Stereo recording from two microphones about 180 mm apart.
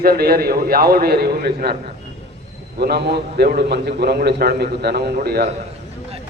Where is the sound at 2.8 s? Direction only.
65° right (ahead or behind).